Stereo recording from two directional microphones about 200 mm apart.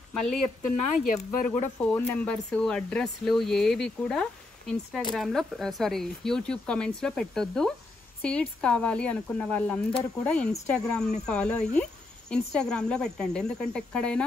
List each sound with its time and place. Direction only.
0.6 s speech: 40° left (ahead or behind)
1.8 s speech: 10° left (ahead or behind)